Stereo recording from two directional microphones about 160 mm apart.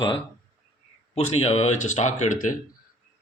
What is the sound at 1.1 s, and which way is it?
Speech, 40° left (ahead or behind).